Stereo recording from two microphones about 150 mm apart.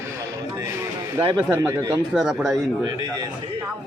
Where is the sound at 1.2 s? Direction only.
20° right (ahead or behind).